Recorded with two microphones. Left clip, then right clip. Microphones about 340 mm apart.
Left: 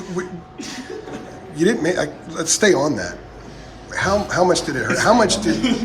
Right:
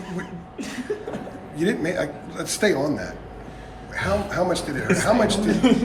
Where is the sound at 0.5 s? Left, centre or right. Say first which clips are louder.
Even; centre.